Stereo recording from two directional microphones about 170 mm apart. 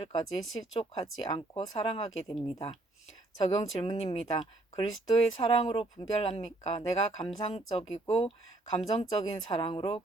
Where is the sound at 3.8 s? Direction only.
35° left (ahead or behind).